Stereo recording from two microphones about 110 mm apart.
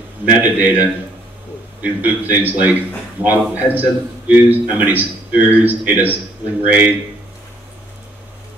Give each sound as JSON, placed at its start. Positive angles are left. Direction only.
{"t": 0.2, "sound": "a man's voice", "side_deg": -15}